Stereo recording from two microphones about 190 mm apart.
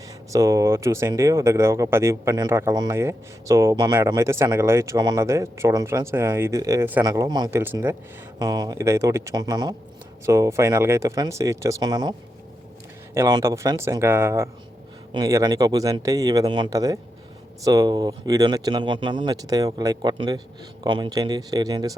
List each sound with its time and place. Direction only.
0.3 s speech: 15° right (ahead or behind)
13.1 s speech: 15° right (ahead or behind)